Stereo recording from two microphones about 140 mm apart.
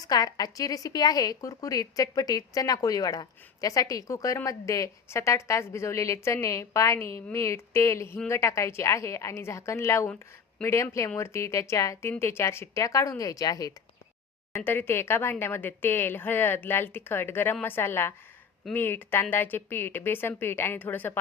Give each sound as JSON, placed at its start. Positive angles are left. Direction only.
{"t": 0.0, "sound": "a woman's voice", "side_deg": 25}
{"t": 14.5, "sound": "speech", "side_deg": 15}